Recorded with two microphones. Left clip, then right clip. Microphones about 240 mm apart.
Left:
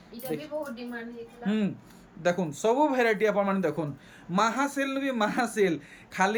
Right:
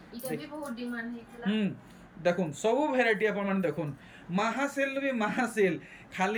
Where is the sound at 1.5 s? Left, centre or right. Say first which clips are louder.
Left 2 dB; centre.